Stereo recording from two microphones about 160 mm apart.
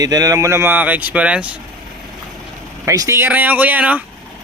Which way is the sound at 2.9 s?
20° right (ahead or behind).